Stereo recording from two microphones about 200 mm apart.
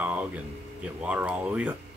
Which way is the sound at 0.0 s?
5° right (ahead or behind).